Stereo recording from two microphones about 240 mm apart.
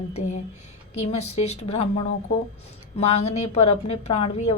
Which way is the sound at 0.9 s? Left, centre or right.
Left.